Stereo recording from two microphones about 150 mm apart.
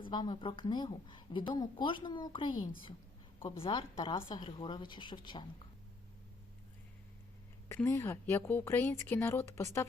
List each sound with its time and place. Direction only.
0.0 s a woman's voice: 30° left (ahead or behind)
7.8 s speech: 15° left (ahead or behind)